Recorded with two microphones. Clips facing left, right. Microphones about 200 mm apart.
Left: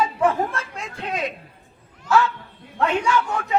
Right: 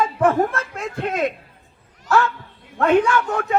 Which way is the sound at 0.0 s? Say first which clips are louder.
Right 3 dB; 50° right (ahead or behind).